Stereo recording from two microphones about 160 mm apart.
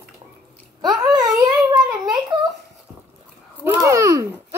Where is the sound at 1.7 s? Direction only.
5° right (ahead or behind).